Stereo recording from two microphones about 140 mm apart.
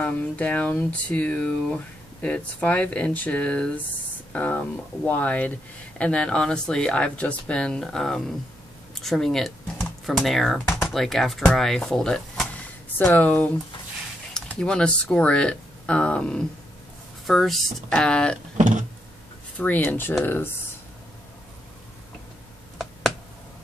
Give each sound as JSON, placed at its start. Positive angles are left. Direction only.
{"t": 0.0, "sound": "speech", "side_deg": 10}
{"t": 19.6, "sound": "speech", "side_deg": 10}